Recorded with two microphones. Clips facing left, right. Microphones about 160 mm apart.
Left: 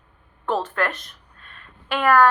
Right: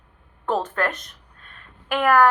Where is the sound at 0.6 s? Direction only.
40° right (ahead or behind).